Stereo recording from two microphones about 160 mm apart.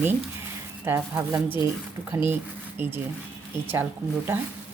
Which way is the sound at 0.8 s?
15° right (ahead or behind).